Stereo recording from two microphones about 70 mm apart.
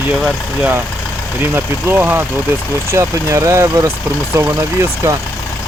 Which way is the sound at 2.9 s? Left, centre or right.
Right.